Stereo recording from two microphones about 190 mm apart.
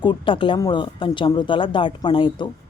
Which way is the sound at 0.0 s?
25° left (ahead or behind).